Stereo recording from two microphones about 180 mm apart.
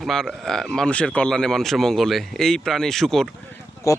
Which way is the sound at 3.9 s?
15° left (ahead or behind).